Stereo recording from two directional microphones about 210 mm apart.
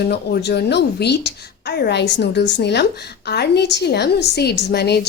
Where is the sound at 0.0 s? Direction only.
50° left (ahead or behind).